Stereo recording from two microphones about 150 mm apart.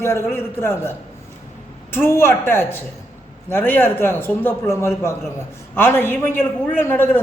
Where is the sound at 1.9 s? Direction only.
15° left (ahead or behind).